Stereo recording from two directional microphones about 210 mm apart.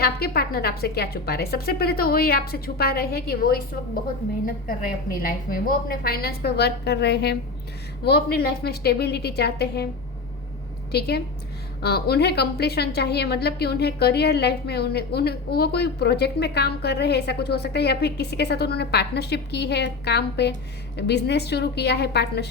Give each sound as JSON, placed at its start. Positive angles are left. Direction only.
{"t": 0.0, "sound": "a woman's voice", "side_deg": 45}
{"t": 10.9, "sound": "a woman's voice", "side_deg": 50}